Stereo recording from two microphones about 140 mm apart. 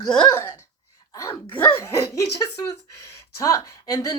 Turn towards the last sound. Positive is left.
turn(degrees=25)  # may be behind; listen again after turning